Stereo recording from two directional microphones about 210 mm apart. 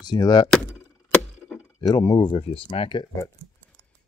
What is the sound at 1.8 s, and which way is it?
Speech, 20° left (ahead or behind).